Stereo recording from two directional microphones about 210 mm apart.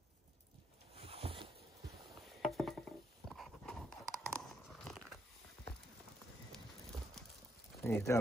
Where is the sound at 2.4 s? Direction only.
Centre (ahead or behind).